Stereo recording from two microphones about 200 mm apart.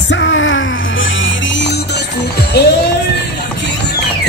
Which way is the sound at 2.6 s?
55° left (ahead or behind).